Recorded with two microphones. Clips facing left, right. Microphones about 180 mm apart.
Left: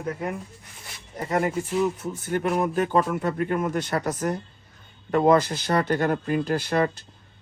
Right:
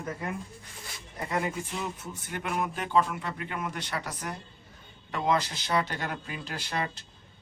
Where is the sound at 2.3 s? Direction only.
45° left (ahead or behind).